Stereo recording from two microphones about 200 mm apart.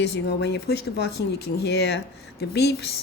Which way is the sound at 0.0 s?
55° left (ahead or behind).